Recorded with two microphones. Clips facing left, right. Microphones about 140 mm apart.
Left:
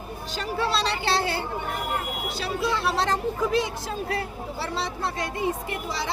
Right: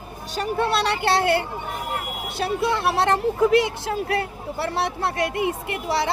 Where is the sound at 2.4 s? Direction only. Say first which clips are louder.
Right 5 dB; 55° right (ahead or behind).